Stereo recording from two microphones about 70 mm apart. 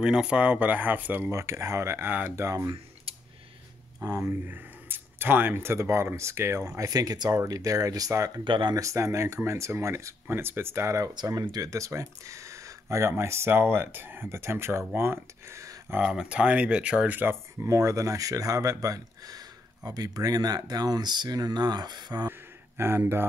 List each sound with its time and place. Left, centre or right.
0.0 s speech: centre
1.3 s speech: right
4.0 s speech: right
4.3 s speech: right
6.8 s speech: right
10.2 s speech: right
11.2 s speech: right
16.0 s speech: centre
17.6 s speech: right
22.8 s speech: right